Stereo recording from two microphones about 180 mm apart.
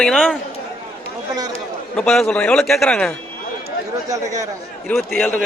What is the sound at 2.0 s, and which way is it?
A man's voice, 5° left (ahead or behind).